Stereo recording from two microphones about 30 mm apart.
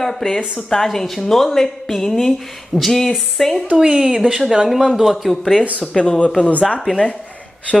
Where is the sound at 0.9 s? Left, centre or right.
Centre.